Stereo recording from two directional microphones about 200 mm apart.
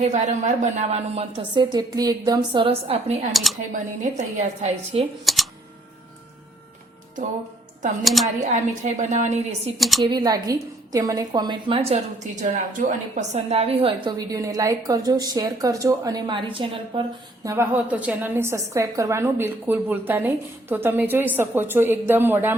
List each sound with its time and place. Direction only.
0.0 s a woman's voice: 35° right (ahead or behind)
5.2 s speech: centre (ahead or behind)
8.0 s speech: centre (ahead or behind)
8.4 s a woman's voice: 35° right (ahead or behind)
9.7 s speech: centre (ahead or behind)
10.1 s a woman's voice: 20° right (ahead or behind)
17.4 s a woman's voice: 10° right (ahead or behind)